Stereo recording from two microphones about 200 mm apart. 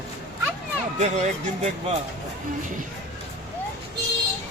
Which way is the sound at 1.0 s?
35° right (ahead or behind).